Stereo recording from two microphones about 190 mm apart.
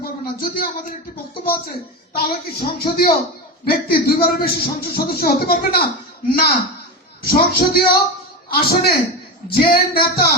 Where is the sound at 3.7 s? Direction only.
50° left (ahead or behind).